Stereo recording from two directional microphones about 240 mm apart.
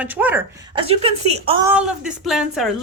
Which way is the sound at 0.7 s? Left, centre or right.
Right.